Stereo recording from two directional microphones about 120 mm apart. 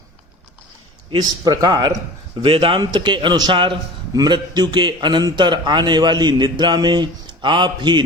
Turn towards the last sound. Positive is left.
turn(degrees=-40)  # may be behind; listen again after turning